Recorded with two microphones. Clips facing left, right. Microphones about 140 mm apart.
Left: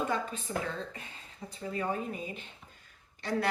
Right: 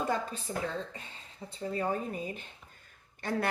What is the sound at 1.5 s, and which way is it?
Speech, 30° right (ahead or behind).